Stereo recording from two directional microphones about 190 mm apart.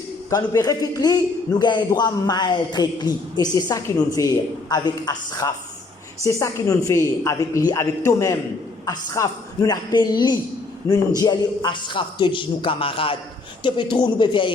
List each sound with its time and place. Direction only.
0.3 s a man's voice: 20° left (ahead or behind)